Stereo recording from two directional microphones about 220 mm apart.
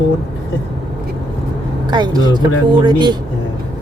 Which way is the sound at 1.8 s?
20° right (ahead or behind).